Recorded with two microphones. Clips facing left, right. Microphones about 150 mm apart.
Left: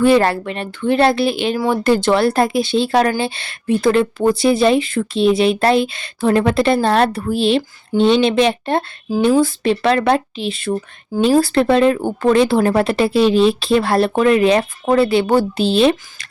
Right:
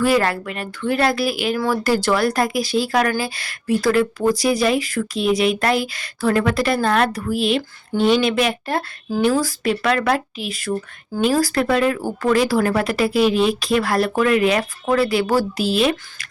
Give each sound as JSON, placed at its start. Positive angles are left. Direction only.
{"t": 0.0, "sound": "speech", "side_deg": 30}